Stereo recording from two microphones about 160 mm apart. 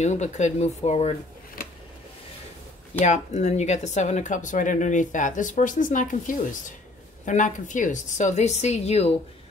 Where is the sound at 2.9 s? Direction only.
45° left (ahead or behind).